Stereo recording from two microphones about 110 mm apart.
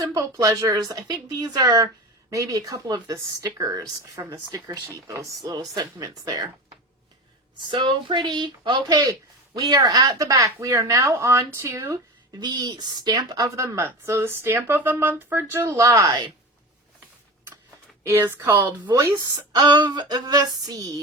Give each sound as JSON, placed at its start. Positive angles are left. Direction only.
{"t": 0.0, "sound": "speech", "side_deg": -30}
{"t": 7.9, "sound": "a woman's voice", "side_deg": -45}
{"t": 12.4, "sound": "a woman's voice", "side_deg": -40}
{"t": 18.0, "sound": "a woman's voice", "side_deg": -20}
{"t": 18.9, "sound": "speech", "side_deg": -35}
{"t": 19.7, "sound": "speech", "side_deg": -45}